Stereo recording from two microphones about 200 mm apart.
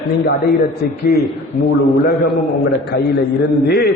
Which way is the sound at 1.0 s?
55° left (ahead or behind).